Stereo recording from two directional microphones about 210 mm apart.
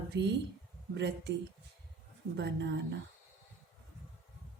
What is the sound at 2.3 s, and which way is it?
Speech, 55° right (ahead or behind).